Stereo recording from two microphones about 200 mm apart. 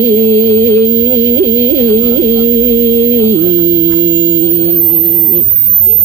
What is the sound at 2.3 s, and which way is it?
Music, 15° left (ahead or behind).